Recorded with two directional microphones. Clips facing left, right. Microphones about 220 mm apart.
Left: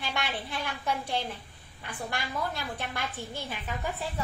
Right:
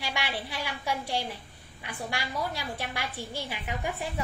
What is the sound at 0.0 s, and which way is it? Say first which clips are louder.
A woman's voice: even; 10° right (ahead or behind).